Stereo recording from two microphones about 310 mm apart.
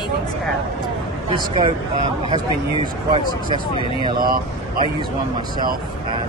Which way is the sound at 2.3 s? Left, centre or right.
Centre.